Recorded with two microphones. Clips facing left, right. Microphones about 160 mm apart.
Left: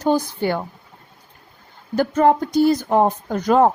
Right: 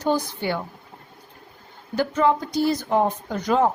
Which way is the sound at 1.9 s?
50° left (ahead or behind).